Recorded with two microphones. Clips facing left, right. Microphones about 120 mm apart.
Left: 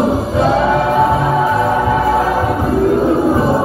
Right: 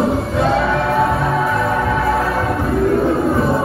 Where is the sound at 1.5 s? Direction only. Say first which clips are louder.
Left 4 dB; 25° left (ahead or behind).